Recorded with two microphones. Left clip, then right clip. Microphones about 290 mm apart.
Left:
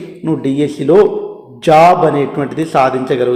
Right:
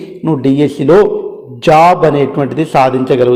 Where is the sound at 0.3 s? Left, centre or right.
Right.